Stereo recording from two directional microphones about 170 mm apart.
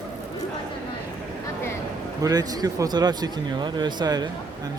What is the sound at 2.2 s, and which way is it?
Speech, 20° right (ahead or behind).